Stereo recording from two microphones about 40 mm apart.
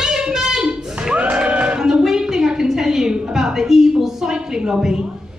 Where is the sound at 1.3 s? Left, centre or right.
Right.